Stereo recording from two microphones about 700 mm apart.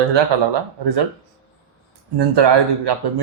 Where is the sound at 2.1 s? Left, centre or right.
Right.